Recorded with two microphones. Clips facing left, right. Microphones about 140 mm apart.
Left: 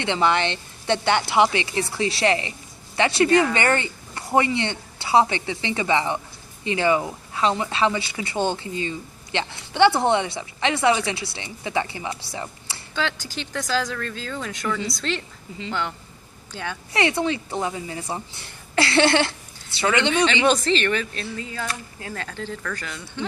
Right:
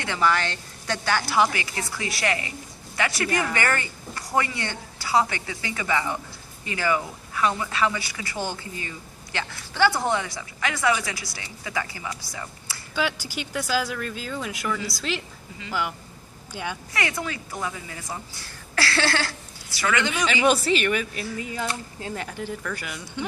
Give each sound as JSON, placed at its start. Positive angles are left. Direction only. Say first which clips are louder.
{"t": 0.0, "sound": "speech", "louder": "left 3 dB", "side_deg": 20}
{"t": 12.9, "sound": "speech", "louder": "even", "side_deg": -10}
{"t": 16.9, "sound": "speech", "louder": "left 9 dB", "side_deg": 25}
{"t": 20.2, "sound": "speech", "louder": "left 2 dB", "side_deg": -10}